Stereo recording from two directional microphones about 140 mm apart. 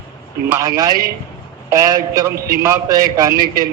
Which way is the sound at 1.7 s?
25° right (ahead or behind).